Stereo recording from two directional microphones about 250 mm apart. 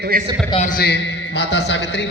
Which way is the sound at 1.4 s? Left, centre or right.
Left.